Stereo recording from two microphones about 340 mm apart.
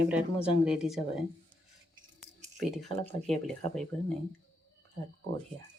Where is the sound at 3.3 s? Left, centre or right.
Centre.